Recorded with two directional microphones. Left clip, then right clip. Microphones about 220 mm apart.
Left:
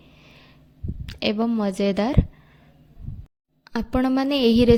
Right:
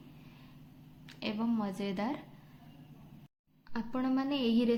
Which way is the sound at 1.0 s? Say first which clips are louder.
Left 13 dB; 45° left (ahead or behind).